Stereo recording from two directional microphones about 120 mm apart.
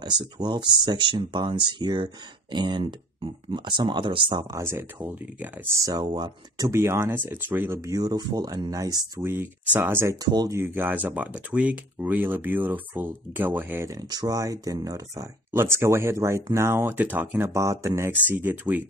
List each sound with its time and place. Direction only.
0.0 s speech: 35° right (ahead or behind)
4.5 s speech: 20° right (ahead or behind)
5.8 s speech: 30° right (ahead or behind)
6.7 s speech: 20° right (ahead or behind)
7.8 s speech: 30° right (ahead or behind)
9.2 s speech: 20° right (ahead or behind)
10.2 s speech: 35° right (ahead or behind)
10.6 s speech: 15° right (ahead or behind)
14.0 s speech: 30° right (ahead or behind)
18.2 s speech: 15° right (ahead or behind)